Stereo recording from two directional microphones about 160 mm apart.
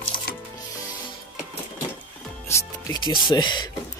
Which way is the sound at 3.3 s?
30° left (ahead or behind).